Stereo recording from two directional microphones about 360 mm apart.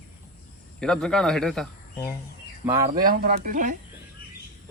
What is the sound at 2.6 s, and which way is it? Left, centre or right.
Speech, centre.